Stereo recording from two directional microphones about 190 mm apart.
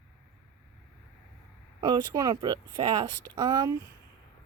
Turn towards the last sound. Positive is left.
turn(degrees=-20)  # may be behind; listen again after turning